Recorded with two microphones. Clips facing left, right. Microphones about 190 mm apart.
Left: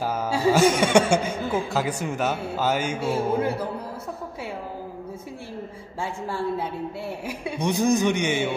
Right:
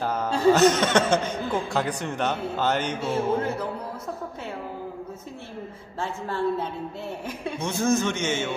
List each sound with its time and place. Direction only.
0.0 s a woman's voice: 10° left (ahead or behind)
5.9 s a woman's voice: 10° left (ahead or behind)